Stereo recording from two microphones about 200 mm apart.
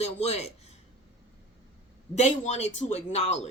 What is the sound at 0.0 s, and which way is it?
Speech, 30° left (ahead or behind).